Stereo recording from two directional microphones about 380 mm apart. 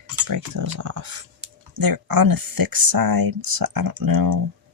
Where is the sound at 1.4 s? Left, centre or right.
Right.